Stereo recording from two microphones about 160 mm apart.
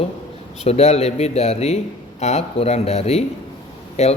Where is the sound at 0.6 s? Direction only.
40° left (ahead or behind).